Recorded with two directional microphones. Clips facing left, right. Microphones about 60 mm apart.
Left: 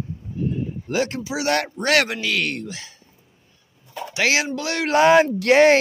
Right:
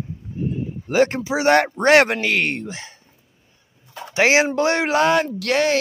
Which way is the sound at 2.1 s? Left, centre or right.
Right.